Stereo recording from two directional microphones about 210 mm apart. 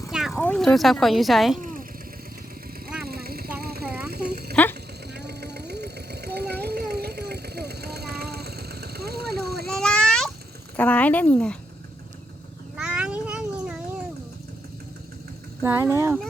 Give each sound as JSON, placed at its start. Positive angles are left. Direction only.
{"t": 0.1, "sound": "a sound", "side_deg": 0}
{"t": 0.3, "sound": "speech", "side_deg": 5}
{"t": 1.5, "sound": "vehicle", "side_deg": -40}
{"t": 3.0, "sound": "vehicle", "side_deg": -45}
{"t": 9.6, "sound": "a sound", "side_deg": 5}
{"t": 10.8, "sound": "speech", "side_deg": 5}
{"t": 12.7, "sound": "cat", "side_deg": -5}
{"t": 15.6, "sound": "speech", "side_deg": -10}